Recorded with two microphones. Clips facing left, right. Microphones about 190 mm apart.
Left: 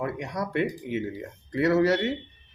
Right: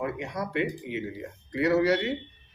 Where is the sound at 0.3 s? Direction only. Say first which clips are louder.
Left 3 dB; 50° left (ahead or behind).